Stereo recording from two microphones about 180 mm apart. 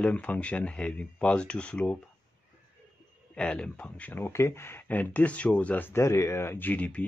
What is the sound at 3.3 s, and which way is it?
Speech, 5° left (ahead or behind).